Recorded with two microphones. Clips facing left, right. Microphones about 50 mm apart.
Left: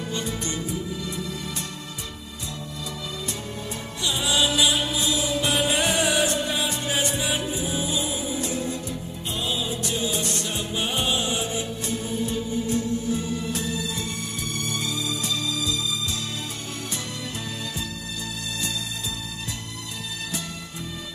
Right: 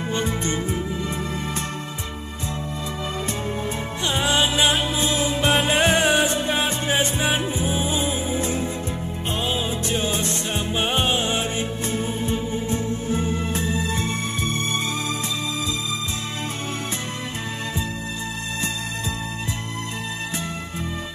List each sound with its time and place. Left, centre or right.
0.1 s music: right
4.0 s music: right